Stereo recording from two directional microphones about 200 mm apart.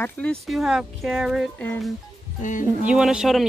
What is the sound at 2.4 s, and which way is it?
Speech, 40° left (ahead or behind).